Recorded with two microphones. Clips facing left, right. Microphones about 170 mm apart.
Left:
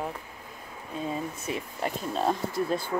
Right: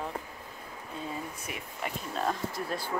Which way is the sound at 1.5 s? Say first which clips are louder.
Left 9 dB; 30° left (ahead or behind).